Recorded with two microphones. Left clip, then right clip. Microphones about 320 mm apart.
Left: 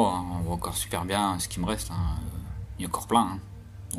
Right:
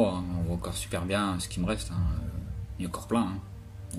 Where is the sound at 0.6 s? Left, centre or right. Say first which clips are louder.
Left 2 dB; centre.